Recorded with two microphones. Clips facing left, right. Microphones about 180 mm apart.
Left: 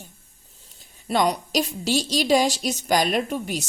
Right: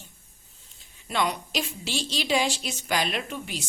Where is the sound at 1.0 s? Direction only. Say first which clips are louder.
Left 6 dB; 40° left (ahead or behind).